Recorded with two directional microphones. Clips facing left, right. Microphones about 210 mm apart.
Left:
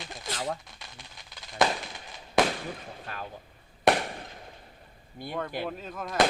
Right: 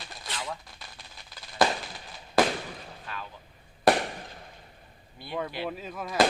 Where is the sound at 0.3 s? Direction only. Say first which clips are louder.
Left 4 dB; 40° left (ahead or behind).